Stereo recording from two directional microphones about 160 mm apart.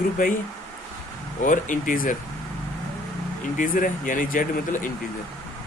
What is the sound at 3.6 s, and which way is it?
Speech, 55° left (ahead or behind).